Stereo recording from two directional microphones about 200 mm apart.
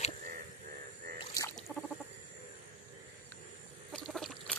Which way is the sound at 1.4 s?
20° left (ahead or behind).